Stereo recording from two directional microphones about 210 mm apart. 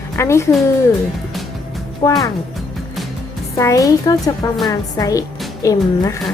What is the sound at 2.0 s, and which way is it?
Speech, 15° left (ahead or behind).